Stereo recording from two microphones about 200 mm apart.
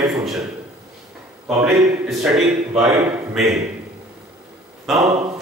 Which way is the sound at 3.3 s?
Centre (ahead or behind).